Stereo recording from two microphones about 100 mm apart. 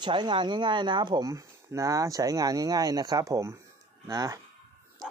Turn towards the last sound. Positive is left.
turn(degrees=-30)  # may be behind; listen again after turning